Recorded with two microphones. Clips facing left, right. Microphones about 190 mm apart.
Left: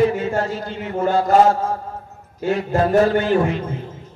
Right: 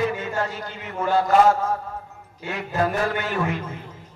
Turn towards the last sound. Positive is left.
turn(degrees=30)  # may be behind; listen again after turning